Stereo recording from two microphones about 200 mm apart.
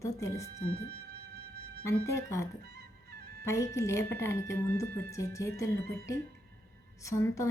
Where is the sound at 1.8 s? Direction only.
15° left (ahead or behind).